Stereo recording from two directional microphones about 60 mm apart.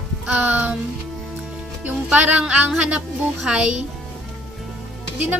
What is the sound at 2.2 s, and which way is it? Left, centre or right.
A woman's voice, right.